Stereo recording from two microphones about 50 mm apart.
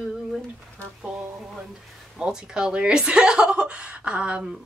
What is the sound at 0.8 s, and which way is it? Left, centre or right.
Speech, left.